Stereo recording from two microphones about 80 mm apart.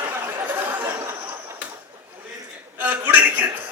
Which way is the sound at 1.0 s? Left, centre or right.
Right.